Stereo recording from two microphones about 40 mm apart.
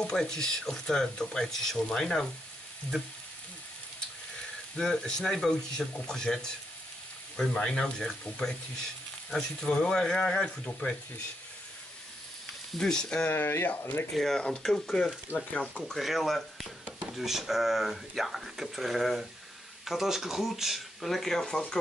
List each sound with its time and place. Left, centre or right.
0.0 s speech: centre
4.7 s speech: centre
7.3 s speech: centre
12.7 s speech: centre
13.3 s speech: left
13.7 s speech: left
14.1 s speech: centre
15.3 s speech: right
15.9 s speech: centre